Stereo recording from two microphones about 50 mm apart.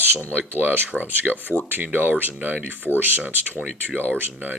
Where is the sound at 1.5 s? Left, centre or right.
Left.